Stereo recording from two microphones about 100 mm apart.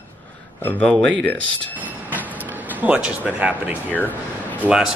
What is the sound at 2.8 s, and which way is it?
Speech, 10° right (ahead or behind).